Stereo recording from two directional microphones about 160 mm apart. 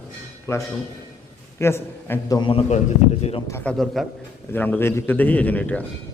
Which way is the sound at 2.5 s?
35° left (ahead or behind).